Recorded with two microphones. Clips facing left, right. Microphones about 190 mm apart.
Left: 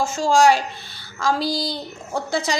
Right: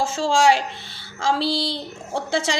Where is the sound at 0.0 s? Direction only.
30° right (ahead or behind).